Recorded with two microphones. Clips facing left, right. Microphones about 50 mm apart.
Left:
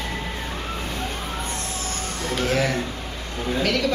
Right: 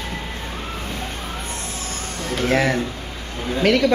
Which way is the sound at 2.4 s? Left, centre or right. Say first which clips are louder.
Right 4 dB; right.